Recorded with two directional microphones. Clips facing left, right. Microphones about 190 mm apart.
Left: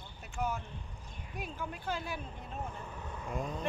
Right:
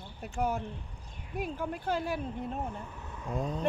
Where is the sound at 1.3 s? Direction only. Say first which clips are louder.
Right 7 dB; 50° right (ahead or behind).